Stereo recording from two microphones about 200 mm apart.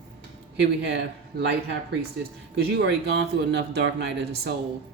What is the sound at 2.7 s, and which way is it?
Speech, 60° right (ahead or behind).